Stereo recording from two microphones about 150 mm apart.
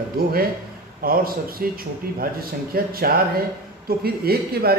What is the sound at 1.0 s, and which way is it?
A man's voice, 75° right (ahead or behind).